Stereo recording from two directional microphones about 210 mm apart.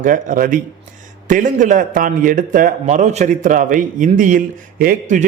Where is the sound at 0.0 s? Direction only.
40° right (ahead or behind).